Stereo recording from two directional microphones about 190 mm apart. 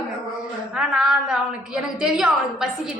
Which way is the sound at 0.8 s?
5° right (ahead or behind).